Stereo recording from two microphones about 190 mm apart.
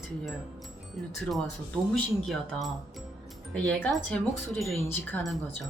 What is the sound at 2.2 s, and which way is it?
Speech, centre (ahead or behind).